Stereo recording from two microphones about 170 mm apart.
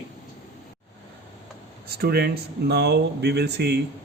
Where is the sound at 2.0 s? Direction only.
65° right (ahead or behind).